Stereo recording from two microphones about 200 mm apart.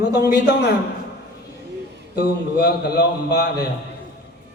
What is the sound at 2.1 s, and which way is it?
A man's voice, 55° left (ahead or behind).